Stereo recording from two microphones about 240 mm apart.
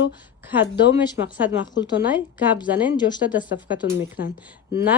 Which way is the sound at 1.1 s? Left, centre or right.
Centre.